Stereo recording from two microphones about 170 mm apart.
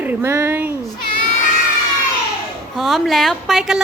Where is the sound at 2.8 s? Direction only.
Centre (ahead or behind).